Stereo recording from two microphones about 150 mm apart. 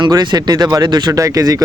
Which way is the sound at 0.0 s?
30° right (ahead or behind).